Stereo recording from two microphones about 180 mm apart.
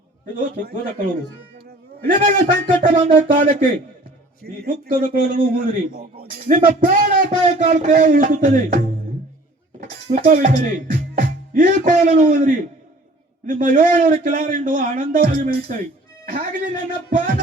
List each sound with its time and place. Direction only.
0.3 s a man's voice: 50° right (ahead or behind)
2.9 s speech: 30° right (ahead or behind)
4.6 s a man's voice: 50° right (ahead or behind)
6.6 s speech: 30° right (ahead or behind)
6.8 s a man's voice: 50° right (ahead or behind)
7.3 s speech: 30° right (ahead or behind)
7.8 s a man's voice: 50° right (ahead or behind)
10.1 s a man's voice: 50° right (ahead or behind)